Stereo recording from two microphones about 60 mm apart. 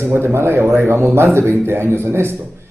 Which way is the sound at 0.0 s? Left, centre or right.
Right.